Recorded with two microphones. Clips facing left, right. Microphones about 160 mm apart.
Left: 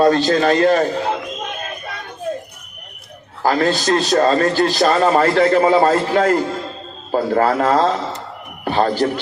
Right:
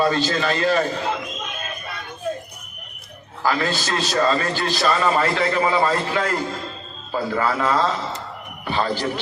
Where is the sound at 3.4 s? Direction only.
45° left (ahead or behind).